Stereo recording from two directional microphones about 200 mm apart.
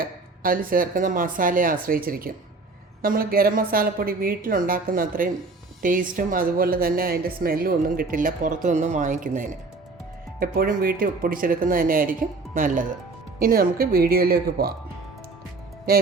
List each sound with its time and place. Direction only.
0.0 s a woman's voice: 45° right (ahead or behind)